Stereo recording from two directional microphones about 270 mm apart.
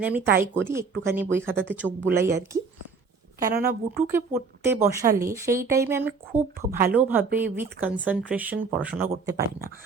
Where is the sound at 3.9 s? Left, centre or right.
Centre.